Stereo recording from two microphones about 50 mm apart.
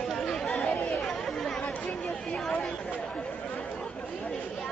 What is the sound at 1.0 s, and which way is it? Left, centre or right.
Chatter, centre.